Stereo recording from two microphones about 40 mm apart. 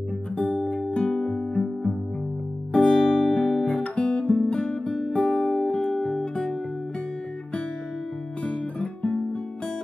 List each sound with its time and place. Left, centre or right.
0.4 s music: left
2.7 s music: centre
3.6 s guitar: left; by 5.5 s centre
5.9 s music: centre
8.5 s guitar: left